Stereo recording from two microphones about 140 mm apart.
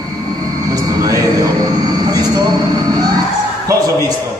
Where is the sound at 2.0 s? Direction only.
25° right (ahead or behind).